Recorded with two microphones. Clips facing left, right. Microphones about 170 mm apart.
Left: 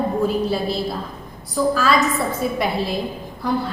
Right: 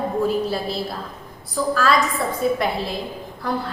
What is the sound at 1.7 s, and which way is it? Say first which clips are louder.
Speech: right 2 dB; centre (ahead or behind).